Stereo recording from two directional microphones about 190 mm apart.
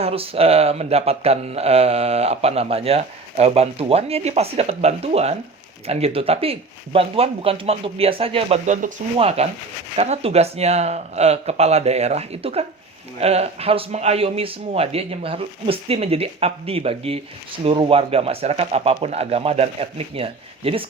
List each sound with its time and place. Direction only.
0.0 s speech: 30° right (ahead or behind)